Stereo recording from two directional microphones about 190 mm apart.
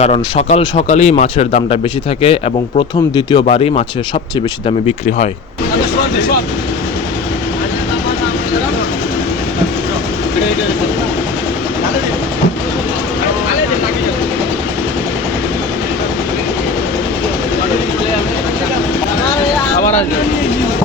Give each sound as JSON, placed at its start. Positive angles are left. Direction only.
{"t": 0.0, "sound": "speech", "side_deg": 35}